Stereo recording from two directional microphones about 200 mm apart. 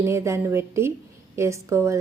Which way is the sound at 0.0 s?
15° right (ahead or behind).